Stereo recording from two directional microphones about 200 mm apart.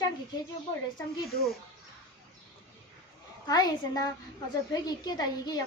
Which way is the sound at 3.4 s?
20° left (ahead or behind).